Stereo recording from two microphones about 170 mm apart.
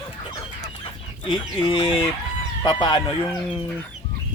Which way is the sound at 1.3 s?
25° left (ahead or behind).